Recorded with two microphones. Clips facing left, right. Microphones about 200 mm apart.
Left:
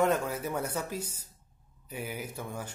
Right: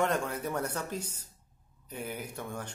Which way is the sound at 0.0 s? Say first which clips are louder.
Left 2 dB; 5° left (ahead or behind).